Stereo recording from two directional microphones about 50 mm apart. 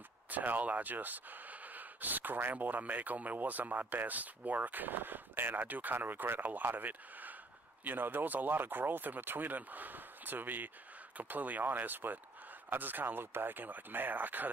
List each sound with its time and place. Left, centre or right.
0.3 s speech: right